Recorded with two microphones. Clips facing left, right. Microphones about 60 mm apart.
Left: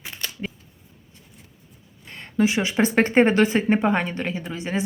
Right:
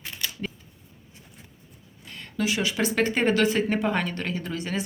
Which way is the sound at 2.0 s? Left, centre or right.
Left.